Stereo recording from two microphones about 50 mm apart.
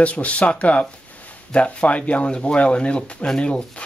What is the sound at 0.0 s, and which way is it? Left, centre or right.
Speech, left.